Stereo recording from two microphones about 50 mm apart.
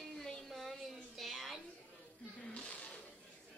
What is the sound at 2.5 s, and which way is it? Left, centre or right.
Music, left.